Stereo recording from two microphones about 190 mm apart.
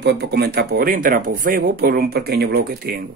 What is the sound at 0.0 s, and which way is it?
Speech, 60° right (ahead or behind).